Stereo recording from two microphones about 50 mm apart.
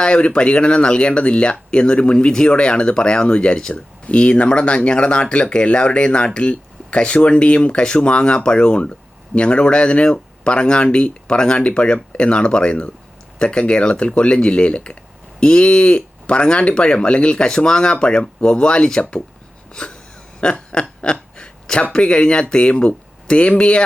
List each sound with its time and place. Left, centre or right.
0.0 s speech: left
19.7 s wheeze: centre
20.4 s a sound: centre
21.9 s speech: centre